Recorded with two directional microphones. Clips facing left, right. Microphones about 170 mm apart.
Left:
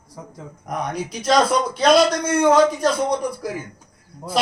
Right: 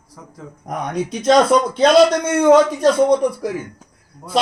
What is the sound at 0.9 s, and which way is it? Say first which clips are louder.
Speech: right 6 dB; 25° right (ahead or behind).